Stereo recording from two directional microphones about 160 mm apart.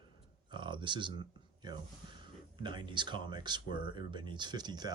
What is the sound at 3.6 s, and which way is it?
Speech, 70° left (ahead or behind).